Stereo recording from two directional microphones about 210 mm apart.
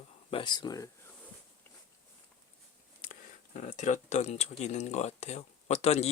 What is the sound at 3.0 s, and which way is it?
Speech, 35° left (ahead or behind).